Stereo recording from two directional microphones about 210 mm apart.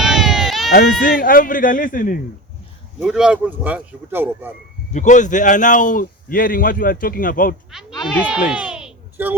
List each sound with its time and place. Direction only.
0.0 s baby cry: centre (ahead or behind)
0.7 s a man's voice: 45° left (ahead or behind)
3.0 s speech: 5° right (ahead or behind)
4.9 s a man's voice: 35° left (ahead or behind)
7.7 s speech: centre (ahead or behind)
8.3 s a sound: 5° right (ahead or behind)